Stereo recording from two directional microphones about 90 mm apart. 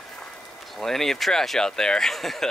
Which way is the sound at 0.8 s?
5° left (ahead or behind).